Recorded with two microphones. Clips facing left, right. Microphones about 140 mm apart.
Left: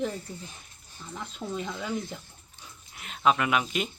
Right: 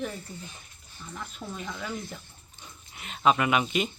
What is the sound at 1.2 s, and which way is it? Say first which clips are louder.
Speech: left 4 dB; 20° left (ahead or behind).